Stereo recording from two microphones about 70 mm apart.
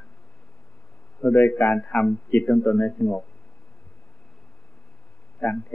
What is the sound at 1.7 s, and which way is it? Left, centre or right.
Speech, centre.